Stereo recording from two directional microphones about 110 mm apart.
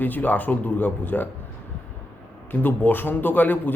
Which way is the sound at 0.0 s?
15° left (ahead or behind).